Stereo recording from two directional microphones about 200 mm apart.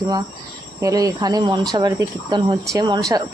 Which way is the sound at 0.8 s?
15° right (ahead or behind).